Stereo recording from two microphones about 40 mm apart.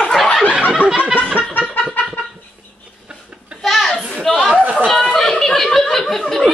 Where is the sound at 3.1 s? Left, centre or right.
Right.